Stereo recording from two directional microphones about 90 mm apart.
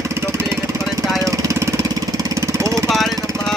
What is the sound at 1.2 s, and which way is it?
Jackhammer, 35° right (ahead or behind).